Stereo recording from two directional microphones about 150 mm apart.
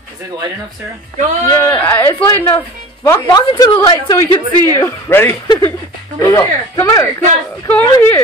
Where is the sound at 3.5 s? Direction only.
30° left (ahead or behind).